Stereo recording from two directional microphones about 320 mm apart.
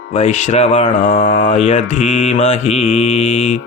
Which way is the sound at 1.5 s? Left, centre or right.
Centre.